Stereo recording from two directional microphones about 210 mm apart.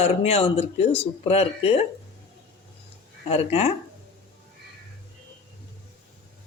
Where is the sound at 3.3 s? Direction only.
30° left (ahead or behind).